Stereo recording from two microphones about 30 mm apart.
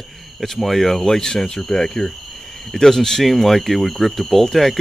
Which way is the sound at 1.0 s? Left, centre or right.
Centre.